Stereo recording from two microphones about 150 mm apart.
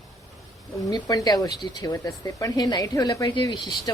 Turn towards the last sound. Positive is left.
turn(degrees=25)  # may be behind; listen again after turning